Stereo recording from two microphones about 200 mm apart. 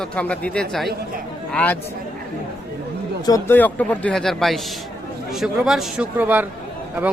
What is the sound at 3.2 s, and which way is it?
A man's voice, 15° left (ahead or behind).